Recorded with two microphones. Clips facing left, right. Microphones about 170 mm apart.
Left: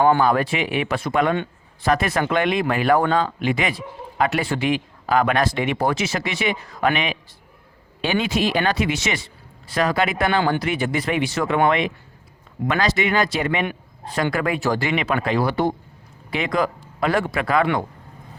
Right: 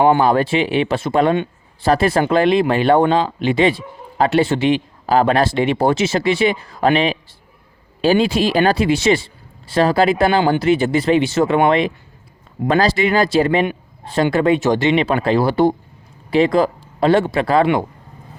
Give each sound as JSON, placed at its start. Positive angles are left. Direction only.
{"t": 0.0, "sound": "speech", "side_deg": -25}